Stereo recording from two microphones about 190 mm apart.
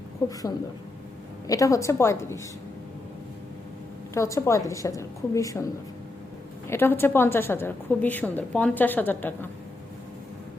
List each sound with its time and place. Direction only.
1.5 s a woman's voice: 15° left (ahead or behind)
4.1 s a woman's voice: 15° left (ahead or behind)
6.7 s a woman's voice: 10° left (ahead or behind)